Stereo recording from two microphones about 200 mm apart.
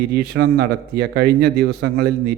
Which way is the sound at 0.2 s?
55° right (ahead or behind).